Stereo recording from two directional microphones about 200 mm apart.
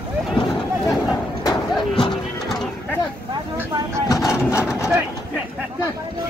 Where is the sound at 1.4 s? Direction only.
20° left (ahead or behind).